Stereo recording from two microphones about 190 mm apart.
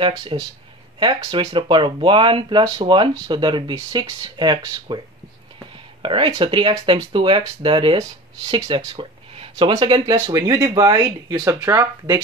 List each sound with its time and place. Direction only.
0.0 s speech: 25° right (ahead or behind)
6.0 s speech: 25° right (ahead or behind)